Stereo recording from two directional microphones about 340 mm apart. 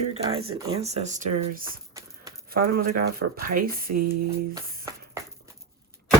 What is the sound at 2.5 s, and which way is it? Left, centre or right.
Speech, right.